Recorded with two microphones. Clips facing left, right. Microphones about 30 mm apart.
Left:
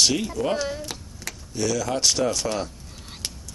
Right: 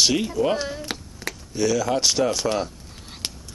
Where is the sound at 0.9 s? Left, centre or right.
Right.